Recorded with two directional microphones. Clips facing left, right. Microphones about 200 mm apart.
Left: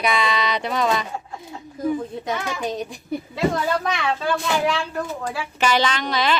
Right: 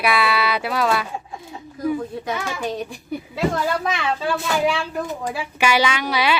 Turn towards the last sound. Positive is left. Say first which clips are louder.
# right 1 dB
turn(degrees=-10)  # may be behind; listen again after turning